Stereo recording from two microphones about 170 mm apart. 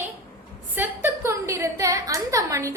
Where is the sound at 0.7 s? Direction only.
10° right (ahead or behind).